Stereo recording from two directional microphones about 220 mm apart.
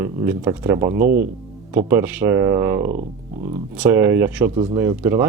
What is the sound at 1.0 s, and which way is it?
Speech, 40° right (ahead or behind).